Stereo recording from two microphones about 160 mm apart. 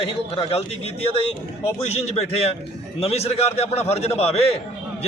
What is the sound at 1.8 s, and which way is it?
A man's voice, 45° left (ahead or behind).